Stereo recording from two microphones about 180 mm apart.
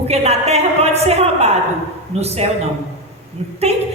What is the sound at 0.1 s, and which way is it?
A woman's voice, 35° right (ahead or behind).